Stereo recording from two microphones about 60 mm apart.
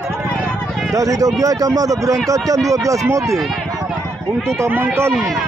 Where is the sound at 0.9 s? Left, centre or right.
Right.